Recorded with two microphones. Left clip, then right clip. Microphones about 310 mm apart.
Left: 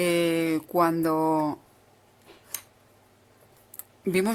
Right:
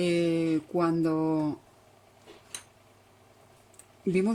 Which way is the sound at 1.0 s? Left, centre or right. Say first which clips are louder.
Left 4 dB; left.